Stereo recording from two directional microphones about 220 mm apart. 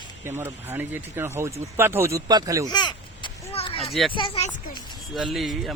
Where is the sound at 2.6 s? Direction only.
20° left (ahead or behind).